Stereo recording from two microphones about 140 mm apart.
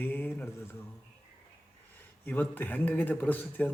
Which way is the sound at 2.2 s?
10° left (ahead or behind).